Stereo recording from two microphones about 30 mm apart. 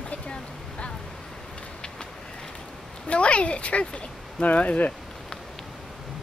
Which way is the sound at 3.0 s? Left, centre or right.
Left.